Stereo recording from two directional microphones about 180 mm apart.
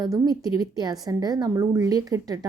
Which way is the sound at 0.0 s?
20° right (ahead or behind).